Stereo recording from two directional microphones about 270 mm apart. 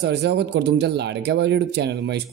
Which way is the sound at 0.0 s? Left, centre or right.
Right.